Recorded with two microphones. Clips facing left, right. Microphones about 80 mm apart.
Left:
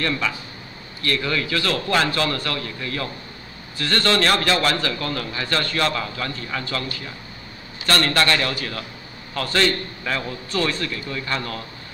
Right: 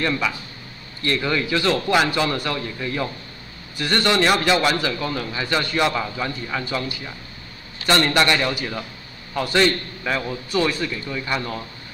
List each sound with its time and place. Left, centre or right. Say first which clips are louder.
0.0 s a man's voice: right 1 dB; centre